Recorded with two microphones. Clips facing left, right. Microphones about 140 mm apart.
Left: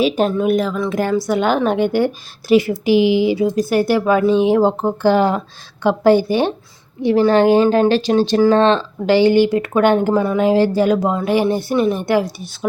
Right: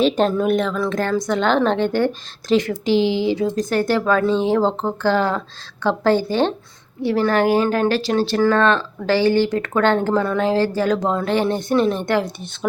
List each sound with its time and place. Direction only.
0.0 s a woman's voice: 5° left (ahead or behind)